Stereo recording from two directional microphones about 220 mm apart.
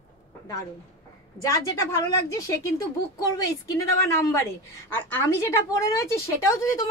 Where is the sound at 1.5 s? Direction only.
15° left (ahead or behind).